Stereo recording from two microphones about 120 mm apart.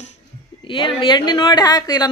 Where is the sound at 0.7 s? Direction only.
45° left (ahead or behind).